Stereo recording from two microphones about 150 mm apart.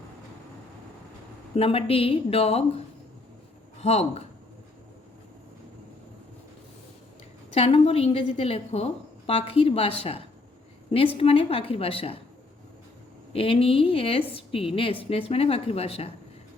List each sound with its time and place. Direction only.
1.5 s a woman's voice: 40° left (ahead or behind)
7.5 s a woman's voice: 40° left (ahead or behind)
13.3 s a woman's voice: 40° left (ahead or behind)